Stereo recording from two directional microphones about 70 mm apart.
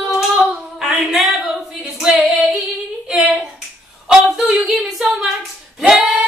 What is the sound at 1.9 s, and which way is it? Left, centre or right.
Female singing, centre.